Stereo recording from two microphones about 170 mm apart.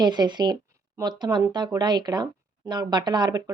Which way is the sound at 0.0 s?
25° right (ahead or behind).